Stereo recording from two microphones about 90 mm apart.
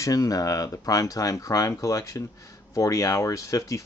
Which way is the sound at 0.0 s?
40° left (ahead or behind).